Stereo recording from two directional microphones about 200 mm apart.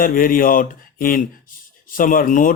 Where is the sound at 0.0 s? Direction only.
45° left (ahead or behind).